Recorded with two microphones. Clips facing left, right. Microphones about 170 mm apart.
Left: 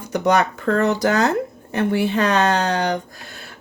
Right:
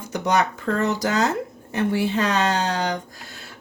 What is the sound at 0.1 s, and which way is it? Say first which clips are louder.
Speech: left 4 dB; 60° left (ahead or behind).